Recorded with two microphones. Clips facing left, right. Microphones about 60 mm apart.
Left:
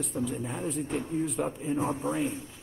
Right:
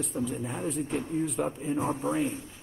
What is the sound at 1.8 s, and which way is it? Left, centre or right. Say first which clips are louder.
Speech: right 2 dB; centre.